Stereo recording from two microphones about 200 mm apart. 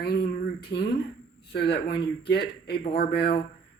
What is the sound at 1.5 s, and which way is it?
Speech, 55° left (ahead or behind).